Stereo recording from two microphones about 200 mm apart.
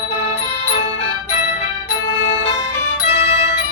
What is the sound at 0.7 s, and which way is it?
Music, 35° left (ahead or behind).